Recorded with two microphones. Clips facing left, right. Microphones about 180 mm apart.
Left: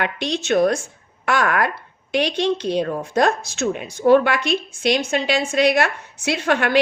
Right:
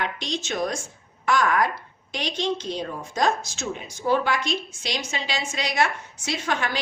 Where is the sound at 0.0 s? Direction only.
60° left (ahead or behind).